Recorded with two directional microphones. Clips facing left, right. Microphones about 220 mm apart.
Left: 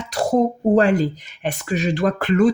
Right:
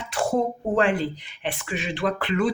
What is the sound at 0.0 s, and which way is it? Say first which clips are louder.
A woman's voice: left 5 dB; 40° left (ahead or behind).